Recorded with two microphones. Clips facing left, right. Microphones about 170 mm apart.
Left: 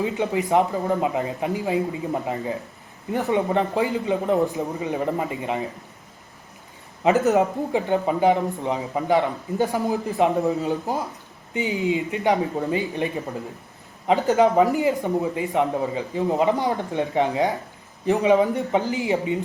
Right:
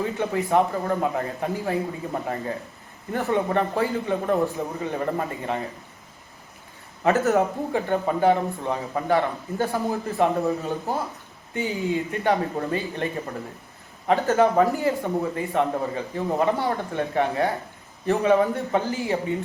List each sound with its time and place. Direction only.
0.0 s speech: 15° left (ahead or behind)
7.0 s speech: 15° left (ahead or behind)
14.1 s speech: 15° left (ahead or behind)